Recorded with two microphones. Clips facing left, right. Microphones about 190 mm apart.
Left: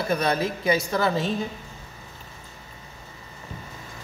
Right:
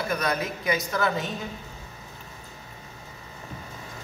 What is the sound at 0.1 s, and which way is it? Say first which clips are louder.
A woman's voice: left 6 dB; 30° left (ahead or behind).